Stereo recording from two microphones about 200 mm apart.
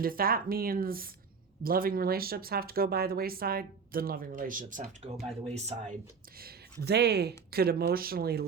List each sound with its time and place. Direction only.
0.0 s speech: 45° right (ahead or behind)
6.4 s speech: 55° right (ahead or behind)